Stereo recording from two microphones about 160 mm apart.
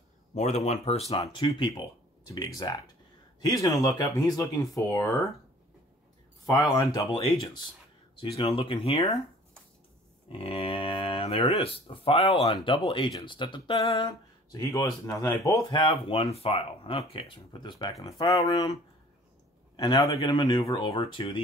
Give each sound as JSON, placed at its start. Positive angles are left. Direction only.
{"t": 0.3, "sound": "speech", "side_deg": 45}
{"t": 6.4, "sound": "speech", "side_deg": 20}
{"t": 10.2, "sound": "speech", "side_deg": 35}
{"t": 14.0, "sound": "speech", "side_deg": 20}
{"t": 15.8, "sound": "speech", "side_deg": 35}
{"t": 19.8, "sound": "speech", "side_deg": 25}